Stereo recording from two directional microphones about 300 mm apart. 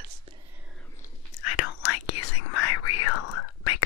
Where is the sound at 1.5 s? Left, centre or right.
Left.